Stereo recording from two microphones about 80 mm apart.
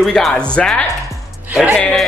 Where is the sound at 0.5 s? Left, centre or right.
Centre.